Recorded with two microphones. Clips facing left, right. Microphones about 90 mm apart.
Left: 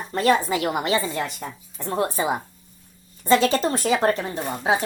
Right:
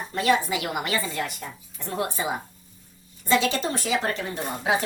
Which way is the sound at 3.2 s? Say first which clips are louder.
Left 5 dB; 40° left (ahead or behind).